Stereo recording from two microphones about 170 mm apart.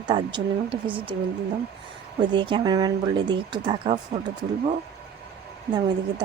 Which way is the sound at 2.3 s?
30° right (ahead or behind).